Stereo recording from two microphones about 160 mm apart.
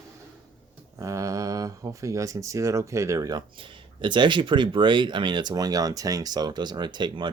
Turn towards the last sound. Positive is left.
turn(degrees=-30)  # may be behind; listen again after turning